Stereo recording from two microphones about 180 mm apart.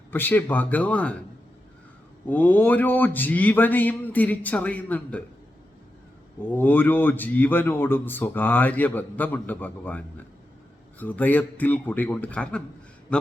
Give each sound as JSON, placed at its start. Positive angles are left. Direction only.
{"t": 0.1, "sound": "a man's voice", "side_deg": 10}
{"t": 2.2, "sound": "a man's voice", "side_deg": 10}
{"t": 6.5, "sound": "a man's voice", "side_deg": 10}
{"t": 11.0, "sound": "a man's voice", "side_deg": 10}